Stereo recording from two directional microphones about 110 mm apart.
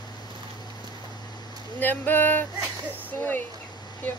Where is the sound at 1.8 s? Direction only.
15° left (ahead or behind).